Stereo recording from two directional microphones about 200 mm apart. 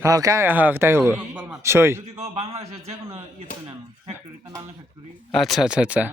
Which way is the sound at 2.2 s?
30° right (ahead or behind).